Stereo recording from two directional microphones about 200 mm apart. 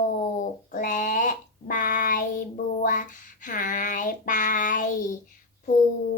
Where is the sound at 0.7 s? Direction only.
40° left (ahead or behind).